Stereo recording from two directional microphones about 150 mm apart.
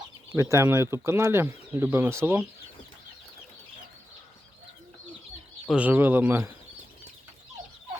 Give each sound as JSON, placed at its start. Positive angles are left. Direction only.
{"t": 0.3, "sound": "speech", "side_deg": -20}
{"t": 5.7, "sound": "speech", "side_deg": -10}